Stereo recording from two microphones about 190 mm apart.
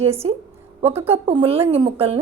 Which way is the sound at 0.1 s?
30° right (ahead or behind).